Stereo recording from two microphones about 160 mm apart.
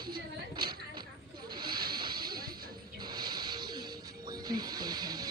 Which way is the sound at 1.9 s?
25° right (ahead or behind).